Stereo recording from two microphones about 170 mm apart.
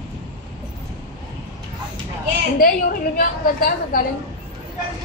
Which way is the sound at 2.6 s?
55° left (ahead or behind).